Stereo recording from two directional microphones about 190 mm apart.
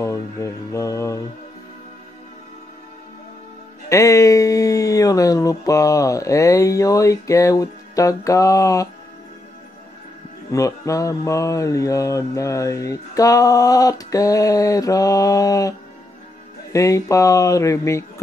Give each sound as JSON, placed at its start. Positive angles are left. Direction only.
{"t": 0.0, "sound": "music", "side_deg": 15}
{"t": 3.9, "sound": "mantra", "side_deg": 15}
{"t": 10.5, "sound": "mantra", "side_deg": 15}
{"t": 16.7, "sound": "mantra", "side_deg": 15}